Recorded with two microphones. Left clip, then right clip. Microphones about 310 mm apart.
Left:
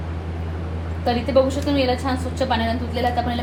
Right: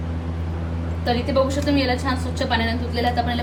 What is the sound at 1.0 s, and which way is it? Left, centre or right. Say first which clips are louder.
A woman's voice: left 2 dB; centre.